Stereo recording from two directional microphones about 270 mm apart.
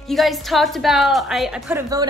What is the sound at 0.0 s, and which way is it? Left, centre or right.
A woman's voice, centre.